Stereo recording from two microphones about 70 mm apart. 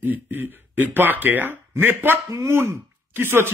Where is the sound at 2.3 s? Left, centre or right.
Right.